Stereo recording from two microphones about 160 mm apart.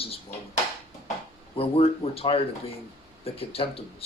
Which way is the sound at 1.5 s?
35° left (ahead or behind).